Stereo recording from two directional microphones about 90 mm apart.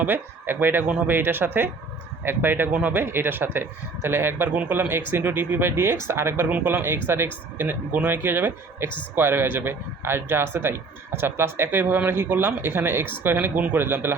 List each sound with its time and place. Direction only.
0.0 s speech: 20° right (ahead or behind)